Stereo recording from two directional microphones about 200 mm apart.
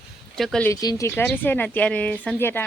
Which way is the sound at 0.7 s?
15° left (ahead or behind).